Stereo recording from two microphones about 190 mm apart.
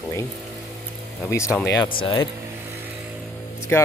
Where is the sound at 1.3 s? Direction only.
15° left (ahead or behind).